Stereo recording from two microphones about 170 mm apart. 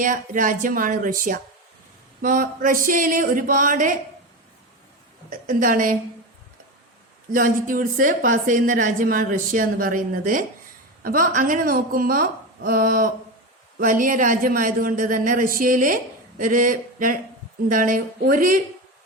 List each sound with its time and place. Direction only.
0.0 s a woman's voice: 50° right (ahead or behind)
5.5 s a woman's voice: 50° right (ahead or behind)
7.3 s a woman's voice: 55° right (ahead or behind)